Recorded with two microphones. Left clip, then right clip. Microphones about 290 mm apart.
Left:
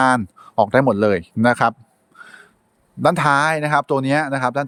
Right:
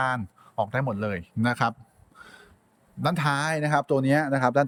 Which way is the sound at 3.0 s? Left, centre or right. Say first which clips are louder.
Left 11 dB; centre.